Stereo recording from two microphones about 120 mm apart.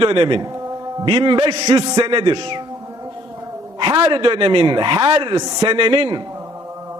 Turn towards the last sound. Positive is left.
turn(degrees=-40)  # may be behind; listen again after turning